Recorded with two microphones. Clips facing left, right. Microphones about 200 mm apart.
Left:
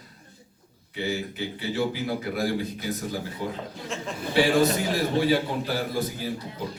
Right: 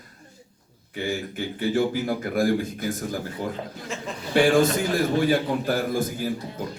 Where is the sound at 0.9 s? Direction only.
50° right (ahead or behind).